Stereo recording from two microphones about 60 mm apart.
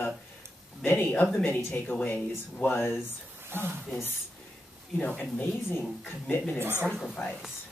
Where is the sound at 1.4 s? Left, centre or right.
Left.